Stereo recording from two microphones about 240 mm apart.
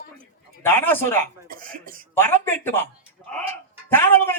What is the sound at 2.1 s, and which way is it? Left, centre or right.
Speech, centre.